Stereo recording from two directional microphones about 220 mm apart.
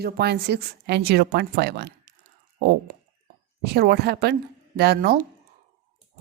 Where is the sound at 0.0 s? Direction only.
45° right (ahead or behind).